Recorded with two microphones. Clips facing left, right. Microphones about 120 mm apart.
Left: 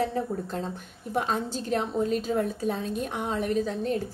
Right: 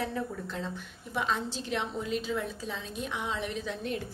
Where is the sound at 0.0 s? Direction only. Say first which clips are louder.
Left 6 dB; 40° left (ahead or behind).